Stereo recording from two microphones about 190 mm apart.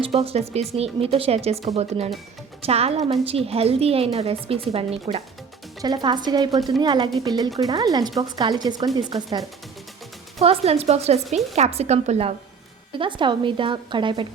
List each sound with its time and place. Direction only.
0.0 s a woman's voice: 30° right (ahead or behind)
10.4 s a woman's voice: 30° right (ahead or behind)